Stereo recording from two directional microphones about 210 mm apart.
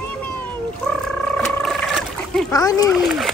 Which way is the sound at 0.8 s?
Centre (ahead or behind).